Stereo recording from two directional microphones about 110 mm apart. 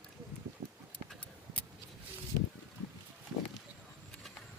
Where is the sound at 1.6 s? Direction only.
15° left (ahead or behind).